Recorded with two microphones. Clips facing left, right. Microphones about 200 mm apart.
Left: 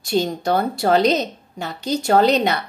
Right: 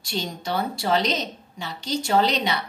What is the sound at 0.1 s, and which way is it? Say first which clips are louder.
A woman's voice: left 9 dB; 45° left (ahead or behind).